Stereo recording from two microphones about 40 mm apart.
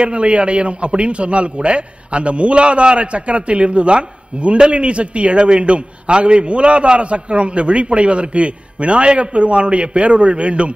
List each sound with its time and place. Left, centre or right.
0.0 s a man's voice: right